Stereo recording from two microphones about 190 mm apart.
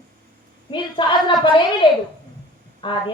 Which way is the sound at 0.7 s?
25° left (ahead or behind).